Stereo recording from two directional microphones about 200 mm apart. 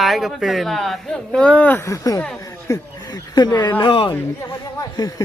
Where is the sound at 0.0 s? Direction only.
Centre (ahead or behind).